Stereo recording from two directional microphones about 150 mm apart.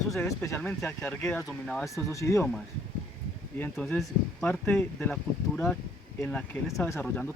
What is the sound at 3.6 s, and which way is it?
Speech, 5° left (ahead or behind).